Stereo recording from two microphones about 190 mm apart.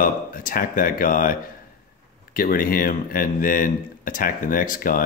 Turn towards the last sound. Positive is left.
turn(degrees=45)  # may be behind; listen again after turning